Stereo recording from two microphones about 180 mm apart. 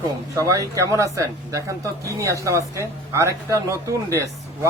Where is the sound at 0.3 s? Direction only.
15° right (ahead or behind).